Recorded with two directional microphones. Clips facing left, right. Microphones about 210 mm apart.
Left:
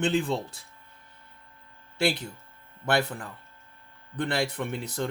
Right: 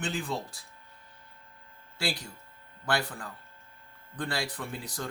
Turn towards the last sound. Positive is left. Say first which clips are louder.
# left 6 dB
turn(degrees=20)  # may be behind; listen again after turning